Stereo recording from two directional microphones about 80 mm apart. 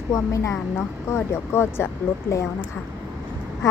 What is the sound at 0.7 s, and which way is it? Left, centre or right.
Speech, left.